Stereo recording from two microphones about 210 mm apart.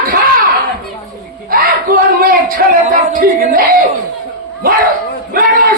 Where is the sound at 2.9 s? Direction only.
40° right (ahead or behind).